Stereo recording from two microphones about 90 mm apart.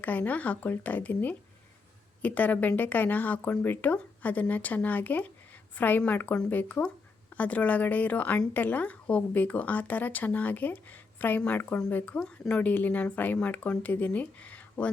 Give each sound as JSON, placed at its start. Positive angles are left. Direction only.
{"t": 0.0, "sound": "speech", "side_deg": 15}